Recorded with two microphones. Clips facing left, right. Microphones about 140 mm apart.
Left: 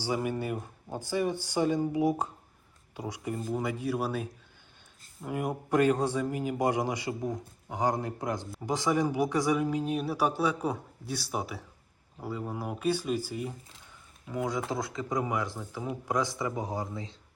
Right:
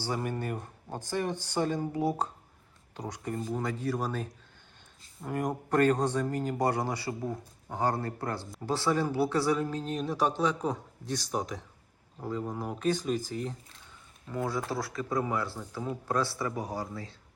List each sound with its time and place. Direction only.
0.0 s a man's voice: 10° left (ahead or behind)